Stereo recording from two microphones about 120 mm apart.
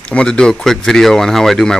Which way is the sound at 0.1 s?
5° left (ahead or behind).